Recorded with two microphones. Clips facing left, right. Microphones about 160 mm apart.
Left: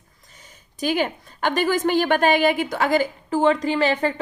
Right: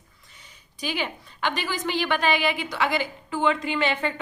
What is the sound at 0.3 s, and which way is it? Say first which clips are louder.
A woman's voice: left 9 dB; 45° left (ahead or behind).